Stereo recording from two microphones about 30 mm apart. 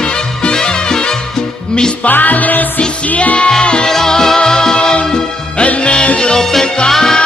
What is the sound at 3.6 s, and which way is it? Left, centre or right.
Music, left.